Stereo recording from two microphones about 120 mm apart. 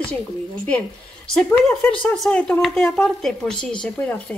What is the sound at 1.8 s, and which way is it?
A woman's voice, 10° left (ahead or behind).